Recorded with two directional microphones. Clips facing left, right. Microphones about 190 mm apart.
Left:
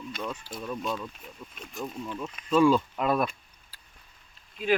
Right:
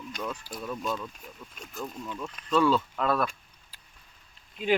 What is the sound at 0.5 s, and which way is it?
Speech, 10° left (ahead or behind).